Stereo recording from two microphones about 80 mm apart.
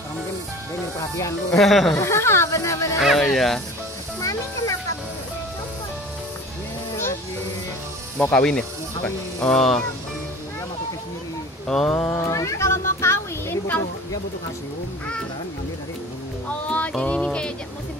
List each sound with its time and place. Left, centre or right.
1.1 s speech: left
1.6 s speech: centre
2.0 s speech: left
3.0 s speech: centre
4.2 s music: left
8.2 s speech: centre
11.6 s speech: centre
12.2 s cat: left
16.4 s speech: centre